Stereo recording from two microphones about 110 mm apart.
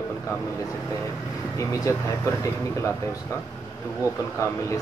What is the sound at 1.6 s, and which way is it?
Speech, 30° left (ahead or behind).